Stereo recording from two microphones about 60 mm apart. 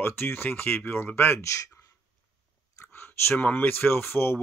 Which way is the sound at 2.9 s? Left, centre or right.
Left.